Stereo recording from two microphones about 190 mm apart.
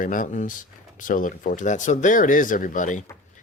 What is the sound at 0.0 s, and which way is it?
Speech, 45° left (ahead or behind).